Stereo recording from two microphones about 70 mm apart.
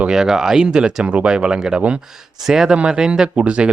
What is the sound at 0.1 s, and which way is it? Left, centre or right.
Speech, centre.